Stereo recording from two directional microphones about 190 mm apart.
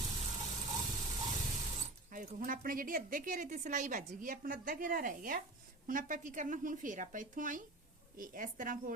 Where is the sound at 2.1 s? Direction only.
45° right (ahead or behind).